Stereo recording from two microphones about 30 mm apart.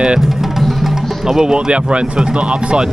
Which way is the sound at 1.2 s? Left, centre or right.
Centre.